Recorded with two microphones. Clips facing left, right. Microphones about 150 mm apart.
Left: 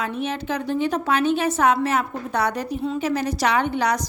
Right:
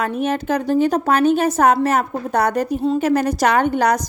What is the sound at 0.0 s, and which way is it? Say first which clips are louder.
A woman's voice: right 6 dB; 45° right (ahead or behind).